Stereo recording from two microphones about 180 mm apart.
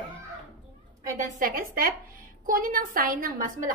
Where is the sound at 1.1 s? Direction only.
45° right (ahead or behind).